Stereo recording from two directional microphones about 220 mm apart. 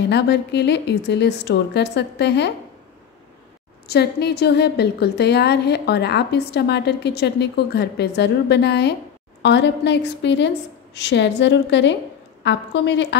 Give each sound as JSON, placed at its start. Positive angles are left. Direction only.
{"t": 0.1, "sound": "a woman's voice", "side_deg": 50}
{"t": 3.8, "sound": "a woman's voice", "side_deg": 50}